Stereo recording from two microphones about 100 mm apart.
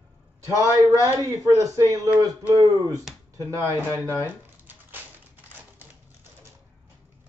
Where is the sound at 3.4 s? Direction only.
30° right (ahead or behind).